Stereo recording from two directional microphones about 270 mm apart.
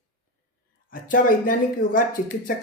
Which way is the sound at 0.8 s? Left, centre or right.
Left.